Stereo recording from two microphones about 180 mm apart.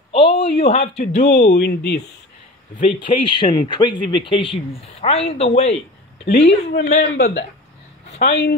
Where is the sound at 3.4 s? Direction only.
25° left (ahead or behind).